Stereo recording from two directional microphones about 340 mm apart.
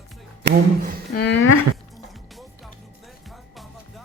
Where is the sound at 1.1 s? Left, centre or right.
Left.